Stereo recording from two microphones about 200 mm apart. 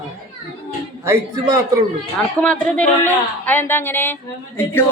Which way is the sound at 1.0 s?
15° right (ahead or behind).